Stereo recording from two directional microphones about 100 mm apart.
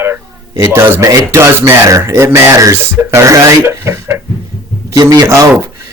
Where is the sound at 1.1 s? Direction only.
30° right (ahead or behind).